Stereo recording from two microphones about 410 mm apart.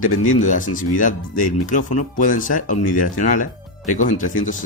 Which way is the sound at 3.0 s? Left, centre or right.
Left.